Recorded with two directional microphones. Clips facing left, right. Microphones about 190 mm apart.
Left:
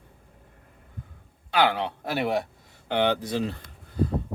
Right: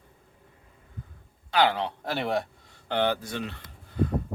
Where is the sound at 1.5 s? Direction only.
15° left (ahead or behind).